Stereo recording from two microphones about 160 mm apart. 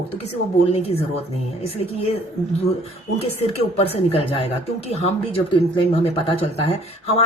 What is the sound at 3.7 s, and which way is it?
Speech, 40° left (ahead or behind).